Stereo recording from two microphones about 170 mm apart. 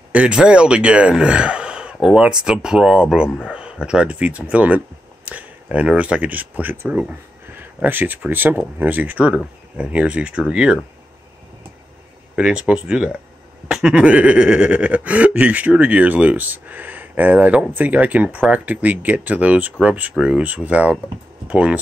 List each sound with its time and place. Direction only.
0.1 s speech: 5° right (ahead or behind)
12.4 s speech: 5° right (ahead or behind)